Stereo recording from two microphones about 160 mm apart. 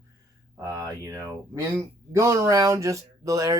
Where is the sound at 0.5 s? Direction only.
20° right (ahead or behind).